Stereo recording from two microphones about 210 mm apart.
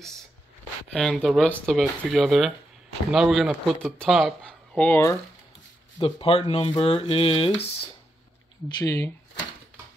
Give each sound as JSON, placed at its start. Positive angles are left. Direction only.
{"t": 0.9, "sound": "speech", "side_deg": 0}
{"t": 5.9, "sound": "speech", "side_deg": 25}
{"t": 8.6, "sound": "speech", "side_deg": 15}